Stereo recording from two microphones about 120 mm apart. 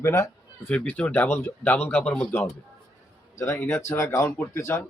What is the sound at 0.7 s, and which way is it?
Speech, 10° left (ahead or behind).